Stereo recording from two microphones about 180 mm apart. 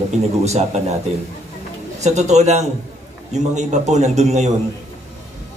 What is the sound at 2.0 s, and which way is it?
A man's voice, 40° right (ahead or behind).